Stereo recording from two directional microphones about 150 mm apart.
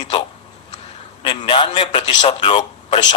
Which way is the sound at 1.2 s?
35° left (ahead or behind).